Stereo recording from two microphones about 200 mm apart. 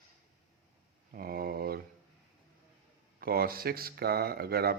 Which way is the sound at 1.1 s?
50° right (ahead or behind).